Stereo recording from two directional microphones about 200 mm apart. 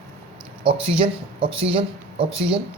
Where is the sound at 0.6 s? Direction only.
25° right (ahead or behind).